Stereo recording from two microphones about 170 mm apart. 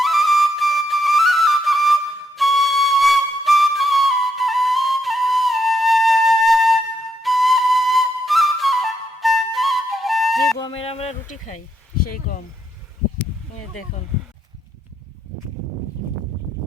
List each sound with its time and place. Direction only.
0.0 s flute: centre (ahead or behind)
10.6 s a sound: 35° left (ahead or behind)
11.9 s speech: 55° left (ahead or behind)